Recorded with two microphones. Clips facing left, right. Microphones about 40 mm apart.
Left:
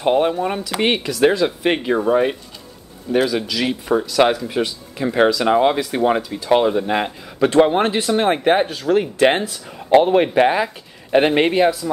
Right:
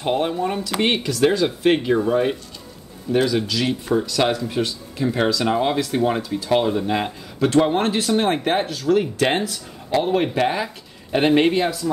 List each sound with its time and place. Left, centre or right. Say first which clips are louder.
0.0 s speech: left 4 dB; centre
7.3 s speech: left 3 dB; left